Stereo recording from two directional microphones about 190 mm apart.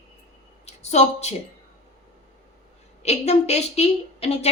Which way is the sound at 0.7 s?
35° left (ahead or behind).